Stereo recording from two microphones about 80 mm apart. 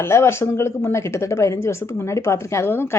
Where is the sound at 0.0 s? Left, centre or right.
Left.